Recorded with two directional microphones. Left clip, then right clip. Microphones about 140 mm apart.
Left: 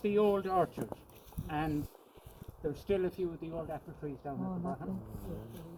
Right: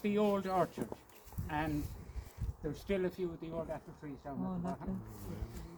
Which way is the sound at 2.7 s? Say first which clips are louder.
Left 3 dB; 15° right (ahead or behind).